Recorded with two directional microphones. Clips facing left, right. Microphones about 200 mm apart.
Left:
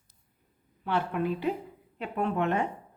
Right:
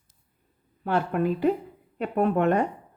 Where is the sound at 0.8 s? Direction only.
45° right (ahead or behind).